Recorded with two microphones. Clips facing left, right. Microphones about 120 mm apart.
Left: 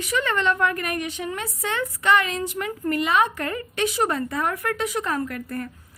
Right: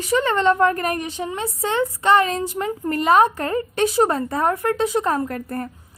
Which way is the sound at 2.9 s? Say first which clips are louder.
Right 6 dB; 40° right (ahead or behind).